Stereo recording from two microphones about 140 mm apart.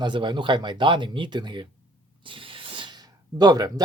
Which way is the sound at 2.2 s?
40° right (ahead or behind).